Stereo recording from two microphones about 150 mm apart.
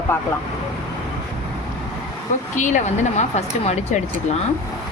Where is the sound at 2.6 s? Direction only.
55° left (ahead or behind).